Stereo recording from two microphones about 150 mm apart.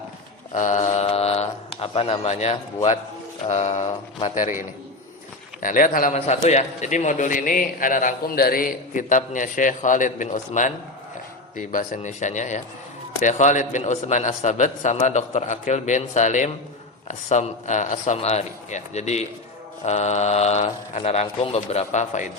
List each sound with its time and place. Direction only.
0.5 s a sound: 60° left (ahead or behind)
3.5 s a man's voice: 45° left (ahead or behind)
5.5 s a man's voice: 65° left (ahead or behind)
6.1 s a man's voice: 50° left (ahead or behind)